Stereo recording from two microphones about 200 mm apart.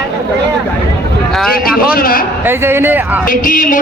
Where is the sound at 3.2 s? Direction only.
45° left (ahead or behind).